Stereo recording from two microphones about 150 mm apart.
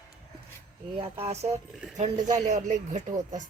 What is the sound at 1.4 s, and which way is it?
Speech, 50° right (ahead or behind).